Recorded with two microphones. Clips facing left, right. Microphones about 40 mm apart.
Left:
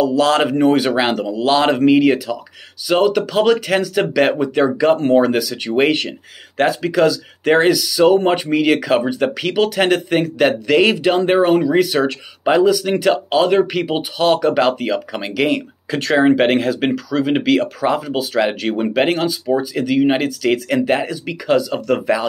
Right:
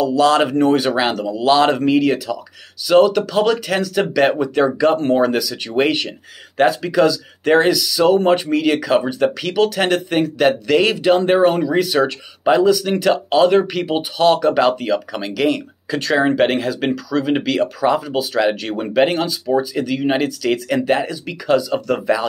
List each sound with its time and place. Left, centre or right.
0.0 s speech: centre